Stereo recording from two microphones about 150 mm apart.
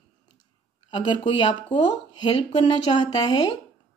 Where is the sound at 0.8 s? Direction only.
30° left (ahead or behind).